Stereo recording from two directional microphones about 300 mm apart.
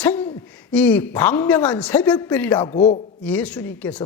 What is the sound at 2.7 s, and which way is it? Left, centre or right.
Speech, centre.